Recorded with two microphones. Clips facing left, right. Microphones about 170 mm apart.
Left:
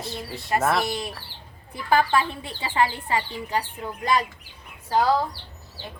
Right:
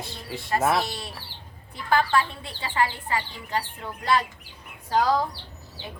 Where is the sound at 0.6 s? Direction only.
Centre (ahead or behind).